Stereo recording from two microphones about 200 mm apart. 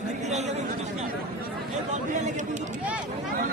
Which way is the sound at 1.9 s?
35° right (ahead or behind).